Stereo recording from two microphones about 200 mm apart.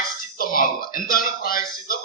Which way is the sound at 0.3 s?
45° left (ahead or behind).